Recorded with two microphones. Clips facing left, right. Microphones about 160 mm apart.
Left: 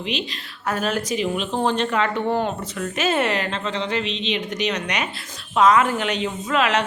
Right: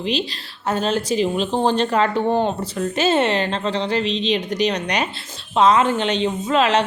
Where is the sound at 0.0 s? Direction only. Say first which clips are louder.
Right 4 dB; 35° right (ahead or behind).